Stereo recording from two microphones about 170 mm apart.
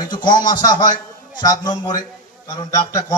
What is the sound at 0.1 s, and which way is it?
Speech, 25° left (ahead or behind).